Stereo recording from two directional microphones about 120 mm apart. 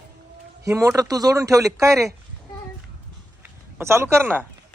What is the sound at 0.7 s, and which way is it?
Speech, 25° right (ahead or behind).